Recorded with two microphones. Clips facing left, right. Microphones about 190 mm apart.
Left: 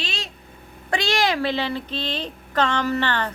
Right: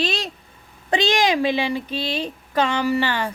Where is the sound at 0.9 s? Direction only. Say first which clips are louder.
Right 3 dB; 20° right (ahead or behind).